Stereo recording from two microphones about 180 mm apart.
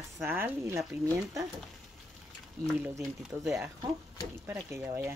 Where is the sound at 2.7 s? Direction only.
10° right (ahead or behind).